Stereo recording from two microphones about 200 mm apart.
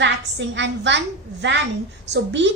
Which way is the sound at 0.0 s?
65° right (ahead or behind).